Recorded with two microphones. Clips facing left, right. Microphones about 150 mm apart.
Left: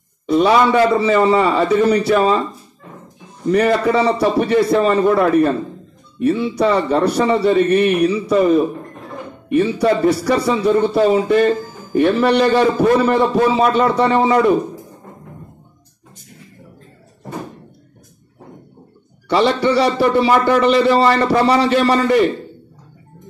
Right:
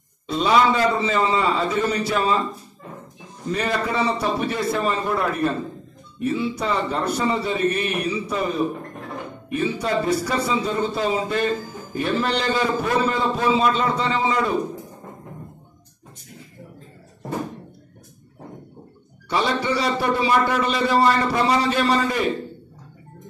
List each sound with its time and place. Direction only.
0.4 s a man's voice: 65° left (ahead or behind)
3.5 s a man's voice: 65° left (ahead or behind)
6.2 s a man's voice: 70° left (ahead or behind)
9.8 s a man's voice: 70° left (ahead or behind)
19.2 s a man's voice: 75° left (ahead or behind)